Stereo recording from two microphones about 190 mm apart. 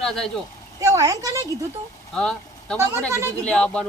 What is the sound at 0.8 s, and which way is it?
Speech, 15° right (ahead or behind).